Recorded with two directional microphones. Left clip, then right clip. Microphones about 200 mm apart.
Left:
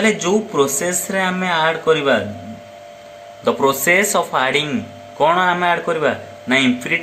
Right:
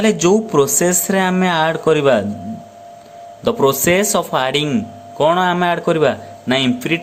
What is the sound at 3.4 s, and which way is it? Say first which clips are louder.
Speech: right 1 dB; 50° right (ahead or behind).